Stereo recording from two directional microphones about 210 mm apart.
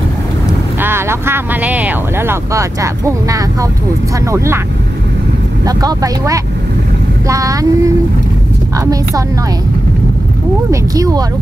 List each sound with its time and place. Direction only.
0.7 s speech: 10° right (ahead or behind)
5.7 s speech: 20° right (ahead or behind)
10.7 s speech: 15° right (ahead or behind)